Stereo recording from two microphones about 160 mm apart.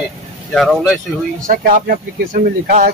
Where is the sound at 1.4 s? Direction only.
60° right (ahead or behind).